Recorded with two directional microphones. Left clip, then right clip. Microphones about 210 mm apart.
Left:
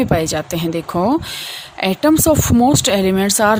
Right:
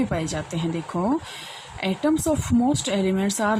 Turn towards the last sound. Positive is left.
turn(degrees=50)  # may be behind; listen again after turning